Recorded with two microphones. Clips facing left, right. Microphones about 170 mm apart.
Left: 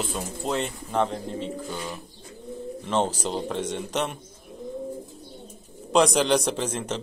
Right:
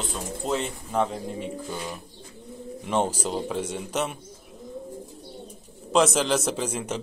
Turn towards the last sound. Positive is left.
turn(degrees=-10)  # may be behind; listen again after turning